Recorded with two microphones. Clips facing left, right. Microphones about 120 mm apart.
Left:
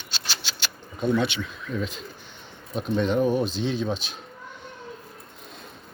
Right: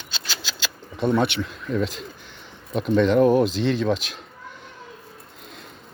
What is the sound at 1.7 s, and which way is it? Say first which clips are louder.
Speech: right 6 dB; 90° right.